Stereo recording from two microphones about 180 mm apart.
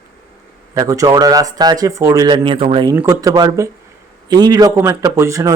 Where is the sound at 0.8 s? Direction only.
20° right (ahead or behind).